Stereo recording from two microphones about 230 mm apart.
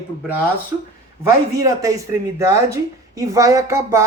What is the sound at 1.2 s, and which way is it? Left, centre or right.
A woman's voice, centre.